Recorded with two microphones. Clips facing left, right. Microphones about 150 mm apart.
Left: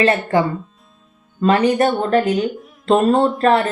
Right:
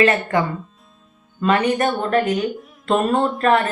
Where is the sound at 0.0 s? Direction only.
30° left (ahead or behind).